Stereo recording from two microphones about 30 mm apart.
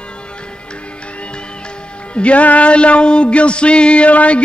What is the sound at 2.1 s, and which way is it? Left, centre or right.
Music, left.